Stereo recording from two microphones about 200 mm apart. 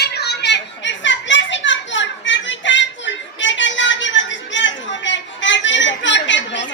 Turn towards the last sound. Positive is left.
turn(degrees=65)  # may be behind; listen again after turning